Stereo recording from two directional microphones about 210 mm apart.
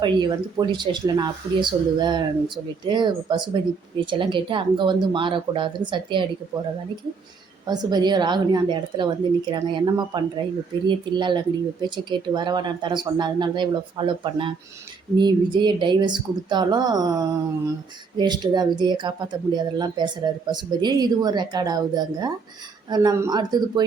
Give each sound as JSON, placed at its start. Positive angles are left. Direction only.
{"t": 0.0, "sound": "a woman's voice", "side_deg": -20}
{"t": 7.7, "sound": "a woman's voice", "side_deg": -20}